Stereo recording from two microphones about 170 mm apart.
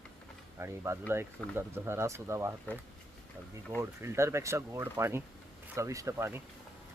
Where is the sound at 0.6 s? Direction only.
15° right (ahead or behind).